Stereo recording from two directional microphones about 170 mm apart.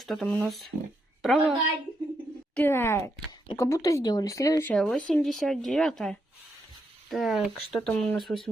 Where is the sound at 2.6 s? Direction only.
15° left (ahead or behind).